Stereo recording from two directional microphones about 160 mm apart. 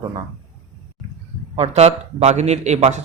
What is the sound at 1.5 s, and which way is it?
A man's voice, 40° right (ahead or behind).